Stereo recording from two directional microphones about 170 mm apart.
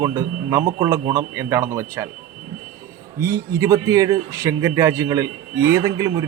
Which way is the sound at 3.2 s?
15° right (ahead or behind).